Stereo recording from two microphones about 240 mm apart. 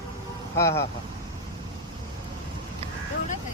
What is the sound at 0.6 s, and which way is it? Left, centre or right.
Speech, centre.